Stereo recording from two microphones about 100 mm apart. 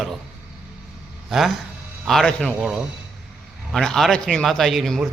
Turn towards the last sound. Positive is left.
turn(degrees=0)  # may be behind; listen again after turning